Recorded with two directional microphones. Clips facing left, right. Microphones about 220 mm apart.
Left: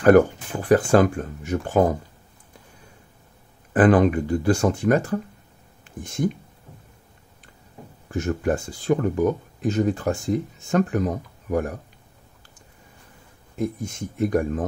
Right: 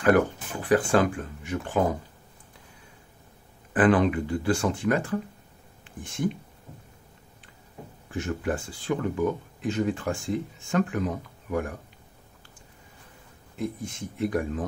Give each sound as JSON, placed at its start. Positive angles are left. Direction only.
{"t": 0.0, "sound": "speech", "side_deg": 45}
{"t": 3.7, "sound": "speech", "side_deg": 40}
{"t": 8.1, "sound": "speech", "side_deg": 45}
{"t": 13.6, "sound": "speech", "side_deg": 45}